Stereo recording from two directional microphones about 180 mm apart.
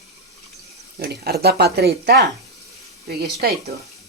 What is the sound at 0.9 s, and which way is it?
Speech, 60° right (ahead or behind).